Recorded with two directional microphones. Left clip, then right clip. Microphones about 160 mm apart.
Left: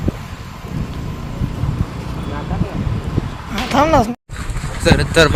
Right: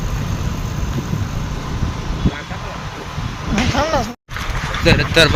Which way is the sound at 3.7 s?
35° left (ahead or behind).